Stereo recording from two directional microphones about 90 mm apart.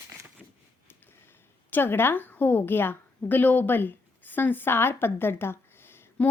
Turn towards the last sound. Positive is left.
turn(degrees=25)  # may be behind; listen again after turning